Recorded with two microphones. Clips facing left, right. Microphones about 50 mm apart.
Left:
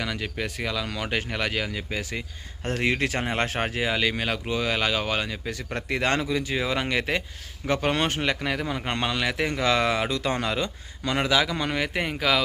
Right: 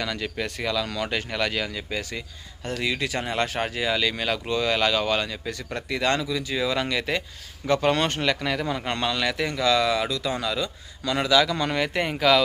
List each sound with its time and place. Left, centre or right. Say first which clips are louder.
0.0 s speech: right 1 dB; centre
2.6 s speech: left 2 dB; left
3.8 s speech: even; centre
11.4 s speech: right 2 dB; centre